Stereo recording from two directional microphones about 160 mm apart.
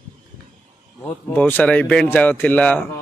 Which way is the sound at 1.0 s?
10° left (ahead or behind).